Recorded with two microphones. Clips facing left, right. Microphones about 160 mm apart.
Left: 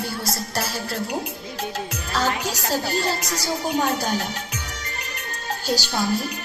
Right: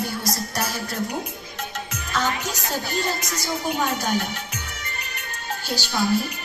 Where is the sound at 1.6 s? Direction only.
35° left (ahead or behind).